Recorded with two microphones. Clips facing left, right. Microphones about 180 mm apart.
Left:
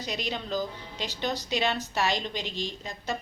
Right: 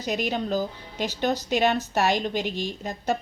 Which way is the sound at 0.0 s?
45° right (ahead or behind).